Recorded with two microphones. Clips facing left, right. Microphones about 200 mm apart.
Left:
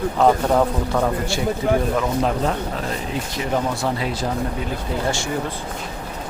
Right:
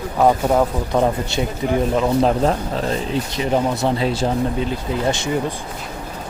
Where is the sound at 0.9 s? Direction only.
20° right (ahead or behind).